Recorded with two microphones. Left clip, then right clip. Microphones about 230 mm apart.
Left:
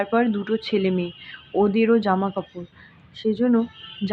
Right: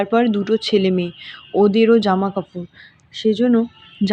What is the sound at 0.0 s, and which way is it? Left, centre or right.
A woman's voice, centre.